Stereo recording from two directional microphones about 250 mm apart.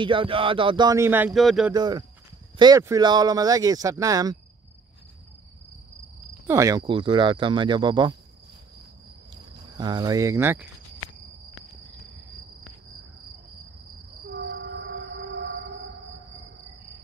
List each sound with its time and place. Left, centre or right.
0.0 s speech: right; by 1.7 s centre
1.7 s speech: centre
6.4 s speech: centre
9.3 s speech: centre
14.3 s music: right